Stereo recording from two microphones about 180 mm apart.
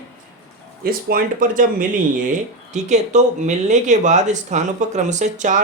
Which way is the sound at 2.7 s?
40° right (ahead or behind).